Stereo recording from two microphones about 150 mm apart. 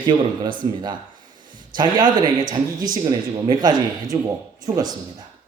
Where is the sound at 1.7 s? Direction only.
30° right (ahead or behind).